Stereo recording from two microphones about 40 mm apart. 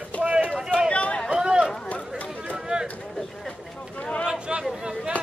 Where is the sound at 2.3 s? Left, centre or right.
Right.